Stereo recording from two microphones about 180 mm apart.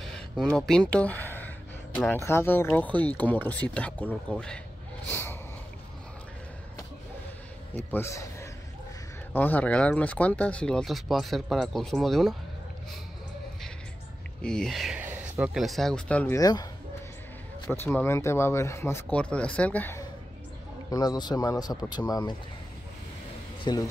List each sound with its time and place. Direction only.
0.0 s a sound: 5° left (ahead or behind)
2.0 s speech: 10° left (ahead or behind)
5.0 s a sound: 10° left (ahead or behind)
7.7 s speech: 15° left (ahead or behind)
14.4 s speech: 5° left (ahead or behind)
16.3 s speech: 20° left (ahead or behind)
17.6 s speech: 10° left (ahead or behind)
23.6 s speech: 20° left (ahead or behind)